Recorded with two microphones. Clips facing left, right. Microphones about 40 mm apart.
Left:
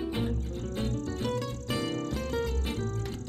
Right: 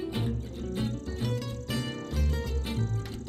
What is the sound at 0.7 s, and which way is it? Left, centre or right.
Music, centre.